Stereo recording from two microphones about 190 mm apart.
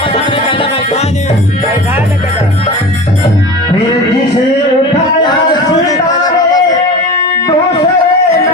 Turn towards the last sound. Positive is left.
turn(degrees=20)  # may be behind; listen again after turning